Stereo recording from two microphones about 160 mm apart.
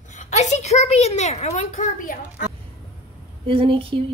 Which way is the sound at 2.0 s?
60° left (ahead or behind).